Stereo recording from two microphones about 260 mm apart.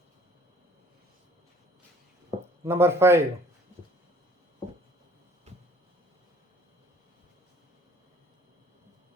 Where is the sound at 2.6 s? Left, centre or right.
Centre.